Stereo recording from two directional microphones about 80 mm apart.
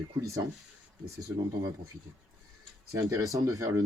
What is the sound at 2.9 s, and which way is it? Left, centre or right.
Speech, right.